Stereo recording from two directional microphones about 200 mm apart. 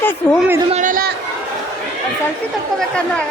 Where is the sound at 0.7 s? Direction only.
40° right (ahead or behind).